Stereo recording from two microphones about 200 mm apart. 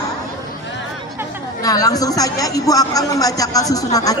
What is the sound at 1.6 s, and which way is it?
Speech, 20° left (ahead or behind).